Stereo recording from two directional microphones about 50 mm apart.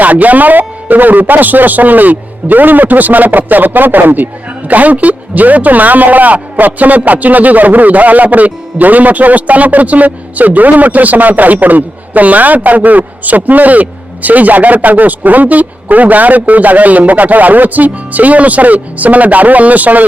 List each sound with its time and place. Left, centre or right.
0.0 s a man's voice: right